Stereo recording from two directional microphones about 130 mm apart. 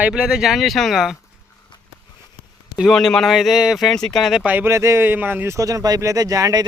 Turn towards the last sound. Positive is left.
turn(degrees=-25)  # may be behind; listen again after turning